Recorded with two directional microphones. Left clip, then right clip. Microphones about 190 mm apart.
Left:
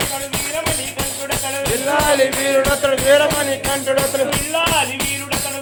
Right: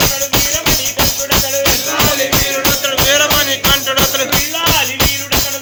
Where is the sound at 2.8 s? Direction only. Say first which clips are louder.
Right 1 dB; 35° left (ahead or behind).